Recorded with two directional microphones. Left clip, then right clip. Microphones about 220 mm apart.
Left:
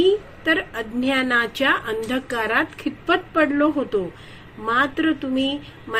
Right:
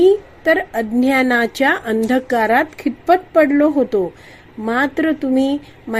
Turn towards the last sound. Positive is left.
turn(degrees=-40)  # may be behind; listen again after turning